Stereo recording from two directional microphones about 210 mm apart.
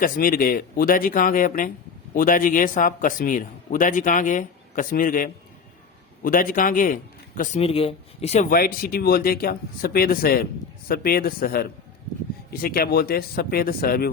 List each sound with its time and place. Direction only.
0.0 s a man's voice: 40° left (ahead or behind)
7.6 s speech: 30° left (ahead or behind); by 14.1 s 45° left (ahead or behind)